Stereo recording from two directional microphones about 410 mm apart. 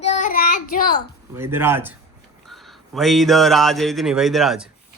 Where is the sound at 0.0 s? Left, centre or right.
Centre.